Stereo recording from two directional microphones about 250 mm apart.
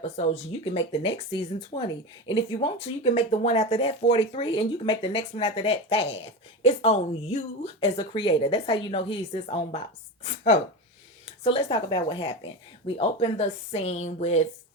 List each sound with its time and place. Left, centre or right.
0.0 s speech: left